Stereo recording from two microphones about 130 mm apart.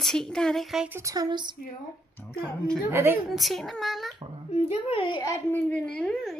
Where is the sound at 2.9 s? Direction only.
20° right (ahead or behind).